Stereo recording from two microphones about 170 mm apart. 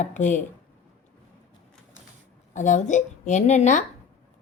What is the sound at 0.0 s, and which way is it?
Speech, 45° left (ahead or behind).